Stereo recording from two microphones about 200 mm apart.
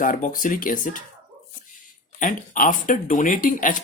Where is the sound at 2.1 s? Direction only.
40° left (ahead or behind).